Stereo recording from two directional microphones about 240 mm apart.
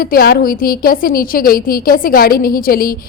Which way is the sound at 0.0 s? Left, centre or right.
Left.